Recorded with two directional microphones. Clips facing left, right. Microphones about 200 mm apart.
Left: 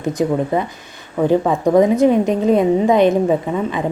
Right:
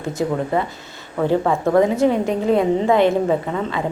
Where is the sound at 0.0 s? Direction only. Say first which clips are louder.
Left 4 dB; 15° left (ahead or behind).